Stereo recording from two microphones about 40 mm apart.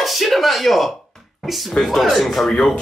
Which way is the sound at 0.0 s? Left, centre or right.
Centre.